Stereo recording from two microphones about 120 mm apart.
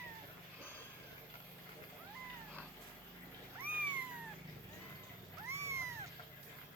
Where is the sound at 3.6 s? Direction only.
10° right (ahead or behind).